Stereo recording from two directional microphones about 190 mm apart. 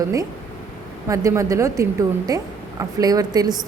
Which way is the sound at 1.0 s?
15° right (ahead or behind).